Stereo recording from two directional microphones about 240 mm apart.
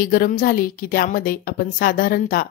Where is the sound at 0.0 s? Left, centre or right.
Left.